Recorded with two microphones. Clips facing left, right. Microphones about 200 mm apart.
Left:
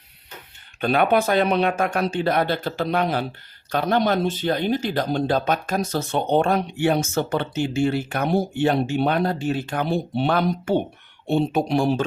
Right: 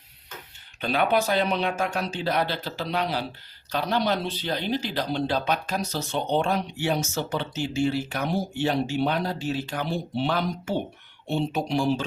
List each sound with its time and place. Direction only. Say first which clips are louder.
0.8 s speech: left 4 dB; 55° left (ahead or behind)